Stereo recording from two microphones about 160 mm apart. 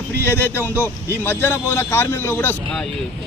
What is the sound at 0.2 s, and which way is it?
Speech, 15° left (ahead or behind).